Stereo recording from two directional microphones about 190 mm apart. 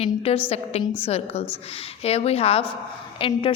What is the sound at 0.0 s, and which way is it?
A woman's voice, 30° left (ahead or behind).